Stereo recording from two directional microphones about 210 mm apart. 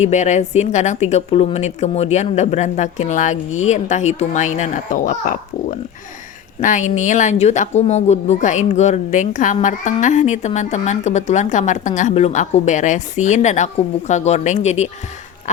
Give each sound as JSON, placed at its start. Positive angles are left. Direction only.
{"t": 0.0, "sound": "speech", "side_deg": 35}
{"t": 6.6, "sound": "speech", "side_deg": 35}